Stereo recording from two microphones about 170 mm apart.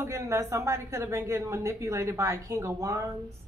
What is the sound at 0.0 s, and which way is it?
A woman's voice, 15° right (ahead or behind).